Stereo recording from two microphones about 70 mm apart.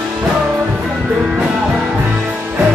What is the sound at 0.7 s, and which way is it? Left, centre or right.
Music, centre.